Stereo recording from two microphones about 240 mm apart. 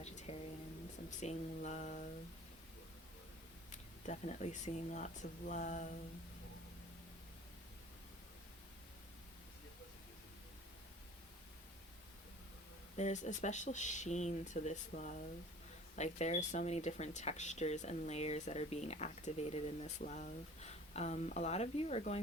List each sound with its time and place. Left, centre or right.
0.0 s a sound: left
1.2 s speech: left
4.0 s speech: left
13.0 s speech: left